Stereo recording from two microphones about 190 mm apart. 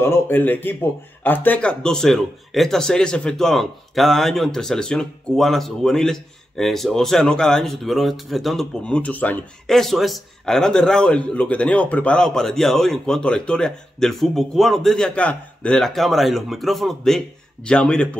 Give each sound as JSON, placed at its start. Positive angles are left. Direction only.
{"t": 0.0, "sound": "speech", "side_deg": 10}